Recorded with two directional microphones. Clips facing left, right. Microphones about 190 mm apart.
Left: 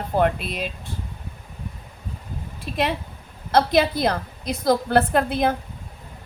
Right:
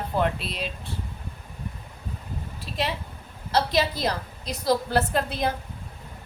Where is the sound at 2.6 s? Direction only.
55° left (ahead or behind).